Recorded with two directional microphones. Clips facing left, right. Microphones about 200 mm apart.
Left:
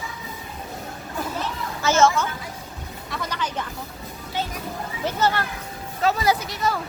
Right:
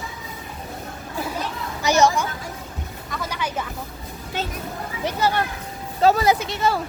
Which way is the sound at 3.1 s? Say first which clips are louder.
Right 1 dB; 5° right (ahead or behind).